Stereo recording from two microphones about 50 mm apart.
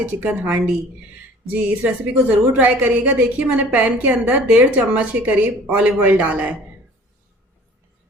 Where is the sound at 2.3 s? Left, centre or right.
Right.